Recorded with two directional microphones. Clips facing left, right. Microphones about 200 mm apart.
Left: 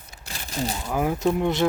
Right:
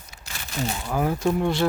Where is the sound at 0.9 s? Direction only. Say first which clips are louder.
Even; 15° left (ahead or behind).